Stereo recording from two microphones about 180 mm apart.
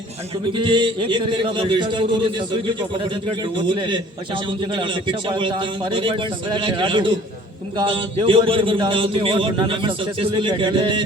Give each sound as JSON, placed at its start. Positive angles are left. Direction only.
{"t": 0.5, "sound": "a man's voice", "side_deg": -25}
{"t": 3.6, "sound": "a man's voice", "side_deg": -25}